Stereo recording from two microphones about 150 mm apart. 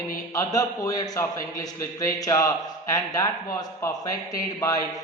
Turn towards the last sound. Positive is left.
turn(degrees=25)  # may be behind; listen again after turning